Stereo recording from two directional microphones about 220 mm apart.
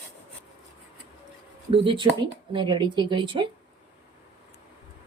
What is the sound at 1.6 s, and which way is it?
Speech, 20° right (ahead or behind).